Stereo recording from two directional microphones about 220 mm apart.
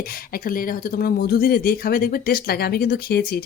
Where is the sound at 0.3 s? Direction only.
40° left (ahead or behind).